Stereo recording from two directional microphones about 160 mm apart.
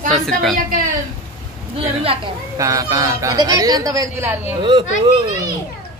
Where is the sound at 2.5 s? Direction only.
20° right (ahead or behind).